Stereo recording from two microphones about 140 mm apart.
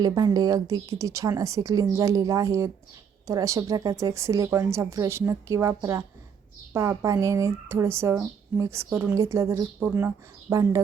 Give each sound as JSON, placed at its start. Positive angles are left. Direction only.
{"t": 0.0, "sound": "a woman's voice", "side_deg": -25}